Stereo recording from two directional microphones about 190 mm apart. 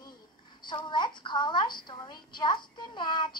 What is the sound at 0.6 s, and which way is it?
A woman's voice, 25° left (ahead or behind).